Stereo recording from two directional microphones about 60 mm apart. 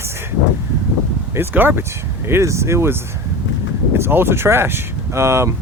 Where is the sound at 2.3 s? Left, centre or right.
Right.